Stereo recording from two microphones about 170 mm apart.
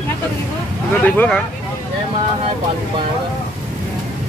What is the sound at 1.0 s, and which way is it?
Speech, 10° left (ahead or behind).